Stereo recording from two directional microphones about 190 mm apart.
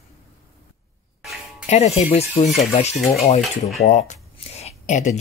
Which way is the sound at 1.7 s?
35° left (ahead or behind).